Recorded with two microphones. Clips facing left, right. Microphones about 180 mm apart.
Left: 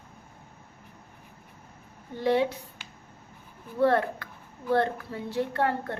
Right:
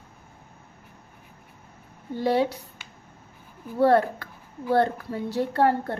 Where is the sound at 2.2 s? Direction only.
35° right (ahead or behind).